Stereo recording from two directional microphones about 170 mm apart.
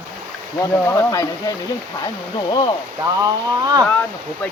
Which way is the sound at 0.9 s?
20° left (ahead or behind).